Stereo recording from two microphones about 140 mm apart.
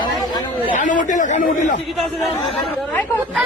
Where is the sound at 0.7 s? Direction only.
65° left (ahead or behind).